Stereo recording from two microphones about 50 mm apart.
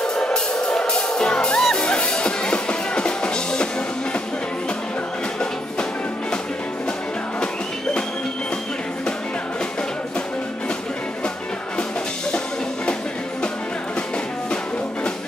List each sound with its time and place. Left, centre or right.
0.0 s music: centre